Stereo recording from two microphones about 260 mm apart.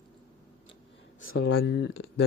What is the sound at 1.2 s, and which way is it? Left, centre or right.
Speech, left.